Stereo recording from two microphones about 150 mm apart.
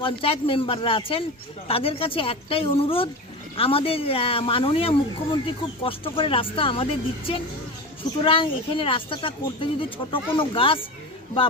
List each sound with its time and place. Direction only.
0.0 s speech: 35° left (ahead or behind)
8.2 s speech: 35° left (ahead or behind)